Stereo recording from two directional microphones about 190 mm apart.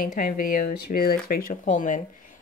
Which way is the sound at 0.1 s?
45° left (ahead or behind).